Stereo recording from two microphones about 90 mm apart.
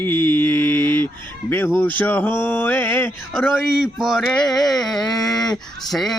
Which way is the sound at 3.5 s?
5° right (ahead or behind).